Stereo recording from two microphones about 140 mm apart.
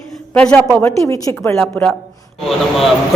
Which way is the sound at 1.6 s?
5° left (ahead or behind).